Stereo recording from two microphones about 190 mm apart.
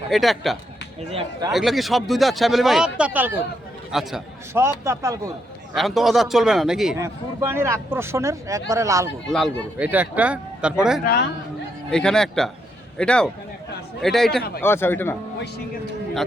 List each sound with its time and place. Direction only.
0.1 s speech: centre (ahead or behind)
4.5 s speech: 15° right (ahead or behind)
5.7 s speech: centre (ahead or behind)
7.0 s speech: 15° right (ahead or behind)
9.2 s speech: centre (ahead or behind)
9.7 s speech: 10° right (ahead or behind)
11.0 s a man's voice: 55° left (ahead or behind)
11.9 s speech: 5° left (ahead or behind)
14.6 s a man's voice: 10° left (ahead or behind)